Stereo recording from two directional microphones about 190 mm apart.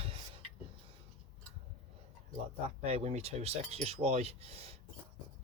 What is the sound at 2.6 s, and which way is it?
Speech, 30° right (ahead or behind).